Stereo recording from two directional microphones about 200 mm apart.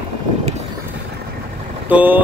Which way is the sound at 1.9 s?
10° right (ahead or behind).